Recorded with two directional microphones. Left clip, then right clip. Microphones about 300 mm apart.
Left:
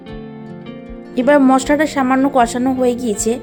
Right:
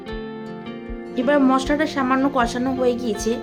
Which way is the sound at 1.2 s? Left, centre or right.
Centre.